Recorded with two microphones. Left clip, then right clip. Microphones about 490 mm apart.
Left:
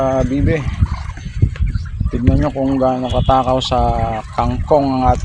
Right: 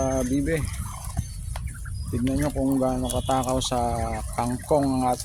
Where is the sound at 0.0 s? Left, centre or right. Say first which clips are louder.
Left 9 dB; right.